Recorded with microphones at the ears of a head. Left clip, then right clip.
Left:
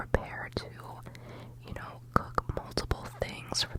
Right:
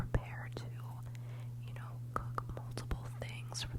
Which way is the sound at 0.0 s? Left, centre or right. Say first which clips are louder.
Left 11 dB; left.